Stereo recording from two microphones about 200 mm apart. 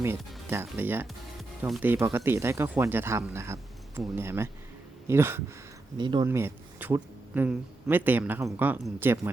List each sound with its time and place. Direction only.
0.5 s speech: 10° right (ahead or behind)
6.0 s speech: 25° right (ahead or behind)
6.2 s speech: 10° right (ahead or behind)